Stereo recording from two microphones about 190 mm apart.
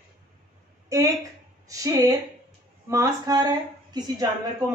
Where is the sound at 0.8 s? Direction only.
15° right (ahead or behind).